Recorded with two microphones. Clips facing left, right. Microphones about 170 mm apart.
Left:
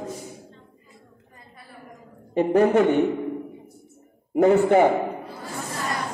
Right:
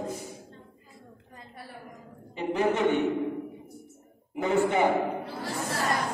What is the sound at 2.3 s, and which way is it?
Speech, 50° left (ahead or behind).